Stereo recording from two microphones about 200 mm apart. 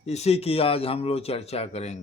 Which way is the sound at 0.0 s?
30° left (ahead or behind).